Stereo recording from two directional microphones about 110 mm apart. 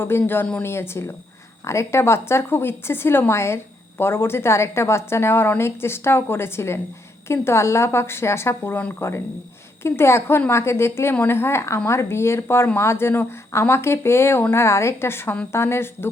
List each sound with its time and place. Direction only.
0.0 s a woman's voice: 20° left (ahead or behind)